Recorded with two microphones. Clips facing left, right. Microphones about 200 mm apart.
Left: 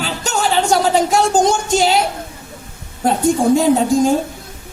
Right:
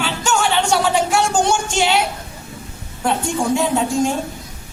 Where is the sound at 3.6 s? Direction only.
35° left (ahead or behind).